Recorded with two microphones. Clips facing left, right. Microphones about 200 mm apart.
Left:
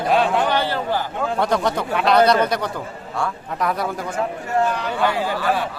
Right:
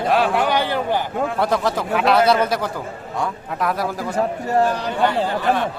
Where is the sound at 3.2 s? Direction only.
20° right (ahead or behind).